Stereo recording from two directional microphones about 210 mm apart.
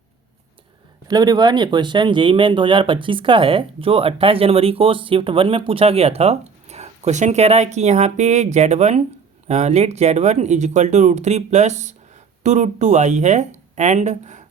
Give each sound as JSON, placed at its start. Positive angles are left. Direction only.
{"t": 1.0, "sound": "speech", "side_deg": -20}